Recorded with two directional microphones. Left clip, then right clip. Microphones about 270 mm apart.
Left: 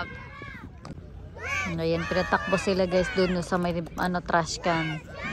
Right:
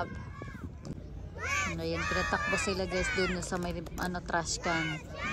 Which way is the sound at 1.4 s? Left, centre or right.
Left.